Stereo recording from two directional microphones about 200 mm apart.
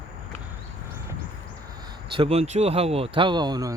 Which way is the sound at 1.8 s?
25° right (ahead or behind).